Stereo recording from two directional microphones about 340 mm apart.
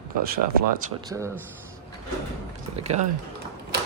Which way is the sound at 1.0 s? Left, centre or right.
Centre.